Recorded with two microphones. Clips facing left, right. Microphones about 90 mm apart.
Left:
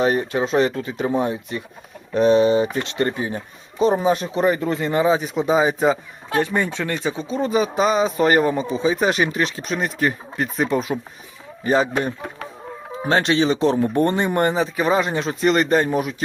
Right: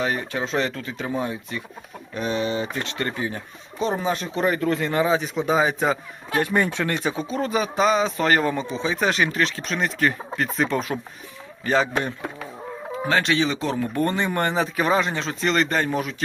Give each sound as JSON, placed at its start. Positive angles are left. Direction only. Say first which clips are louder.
{"t": 0.0, "sound": "a man's voice", "louder": "left 6 dB", "side_deg": 25}
{"t": 14.5, "sound": "speech", "louder": "left 2 dB", "side_deg": 0}
{"t": 14.9, "sound": "a man's voice", "louder": "left 3 dB", "side_deg": 10}